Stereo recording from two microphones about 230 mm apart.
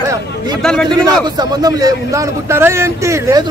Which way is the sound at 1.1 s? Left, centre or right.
Centre.